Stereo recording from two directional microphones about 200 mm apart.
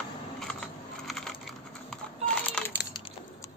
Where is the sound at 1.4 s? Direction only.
5° left (ahead or behind).